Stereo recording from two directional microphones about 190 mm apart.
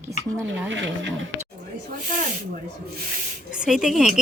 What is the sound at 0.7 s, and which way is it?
Speech, 80° right.